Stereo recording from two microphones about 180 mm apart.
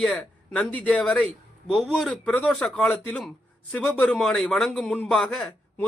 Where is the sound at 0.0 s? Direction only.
5° left (ahead or behind).